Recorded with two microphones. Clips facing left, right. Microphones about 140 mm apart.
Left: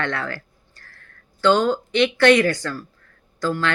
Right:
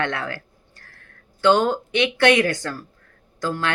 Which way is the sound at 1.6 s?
15° right (ahead or behind).